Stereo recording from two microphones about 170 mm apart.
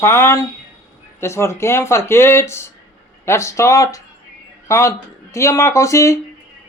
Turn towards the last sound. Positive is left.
turn(degrees=15)  # may be behind; listen again after turning